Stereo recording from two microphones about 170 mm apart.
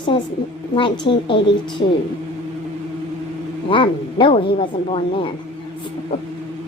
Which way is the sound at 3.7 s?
30° left (ahead or behind).